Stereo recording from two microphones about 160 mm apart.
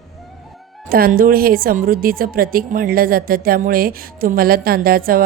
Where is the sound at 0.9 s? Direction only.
65° right (ahead or behind).